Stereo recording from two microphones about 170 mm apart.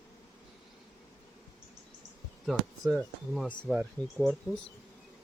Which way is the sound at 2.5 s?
Centre (ahead or behind).